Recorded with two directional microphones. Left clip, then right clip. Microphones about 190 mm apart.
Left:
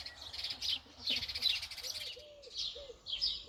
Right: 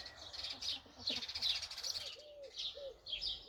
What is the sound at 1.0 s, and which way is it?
Bird, 40° right (ahead or behind).